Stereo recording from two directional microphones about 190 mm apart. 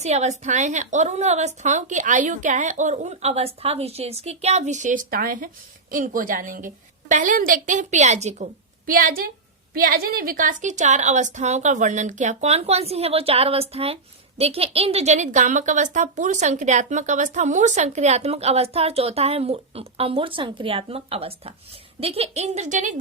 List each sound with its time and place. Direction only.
0.0 s a woman's voice: 35° right (ahead or behind)